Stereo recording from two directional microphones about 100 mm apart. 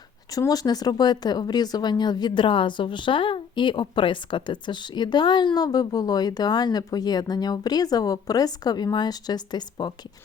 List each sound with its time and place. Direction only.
0.3 s speech: 35° left (ahead or behind)